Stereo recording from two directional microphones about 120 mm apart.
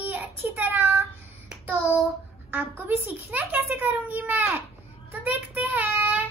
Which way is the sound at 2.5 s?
15° right (ahead or behind).